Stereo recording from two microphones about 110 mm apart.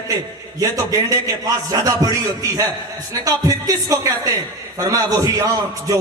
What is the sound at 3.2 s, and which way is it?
A man's voice, 30° right (ahead or behind).